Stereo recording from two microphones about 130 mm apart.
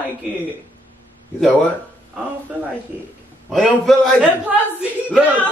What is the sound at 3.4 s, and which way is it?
Speech, centre (ahead or behind).